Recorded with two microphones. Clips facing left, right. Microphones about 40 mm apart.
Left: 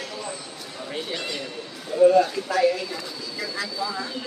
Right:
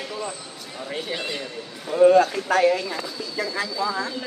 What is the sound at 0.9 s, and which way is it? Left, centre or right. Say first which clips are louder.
Speech: right 2 dB; centre.